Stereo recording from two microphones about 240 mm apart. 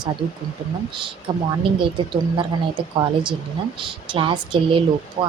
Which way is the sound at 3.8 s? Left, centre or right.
Right.